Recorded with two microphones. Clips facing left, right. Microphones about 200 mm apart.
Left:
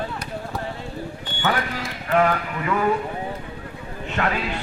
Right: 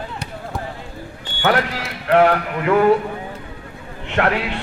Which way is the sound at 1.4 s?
80° right.